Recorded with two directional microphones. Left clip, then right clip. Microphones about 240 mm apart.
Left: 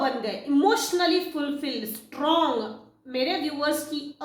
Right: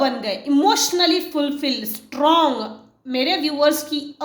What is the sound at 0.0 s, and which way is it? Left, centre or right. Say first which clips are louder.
A woman's voice: right 6 dB; right.